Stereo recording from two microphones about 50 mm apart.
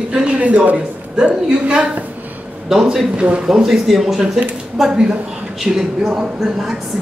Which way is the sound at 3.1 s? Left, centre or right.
Right.